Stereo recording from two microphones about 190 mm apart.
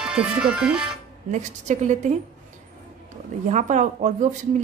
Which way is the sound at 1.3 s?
40° right (ahead or behind).